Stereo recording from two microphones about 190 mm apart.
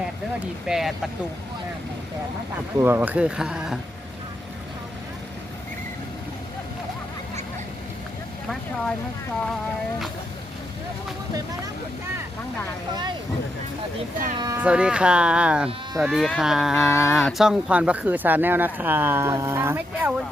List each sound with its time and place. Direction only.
0.7 s speech: centre (ahead or behind)
2.7 s speech: 10° right (ahead or behind)
14.3 s speech: 20° right (ahead or behind)
14.6 s speech: 5° right (ahead or behind)